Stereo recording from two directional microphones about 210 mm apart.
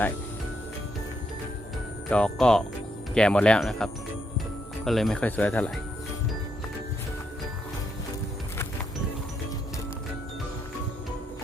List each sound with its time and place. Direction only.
2.0 s speech: 5° left (ahead or behind)
4.9 s speech: centre (ahead or behind)